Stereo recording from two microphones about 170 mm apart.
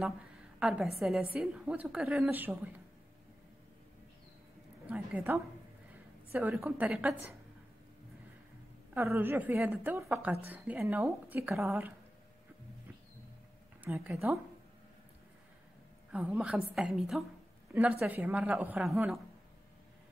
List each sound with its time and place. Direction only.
0.6 s a woman's voice: 5° right (ahead or behind)
4.8 s a woman's voice: 10° right (ahead or behind)
8.9 s a woman's voice: 15° right (ahead or behind)
13.8 s speech: 15° right (ahead or behind)
16.1 s a woman's voice: 5° right (ahead or behind)